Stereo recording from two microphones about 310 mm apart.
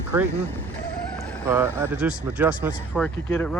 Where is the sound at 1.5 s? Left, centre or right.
Centre.